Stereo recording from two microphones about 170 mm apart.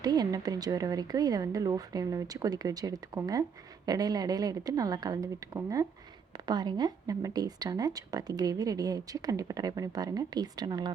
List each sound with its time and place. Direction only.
0.0 s speech: 25° right (ahead or behind)